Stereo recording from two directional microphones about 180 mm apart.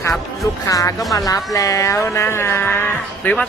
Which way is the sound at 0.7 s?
20° left (ahead or behind).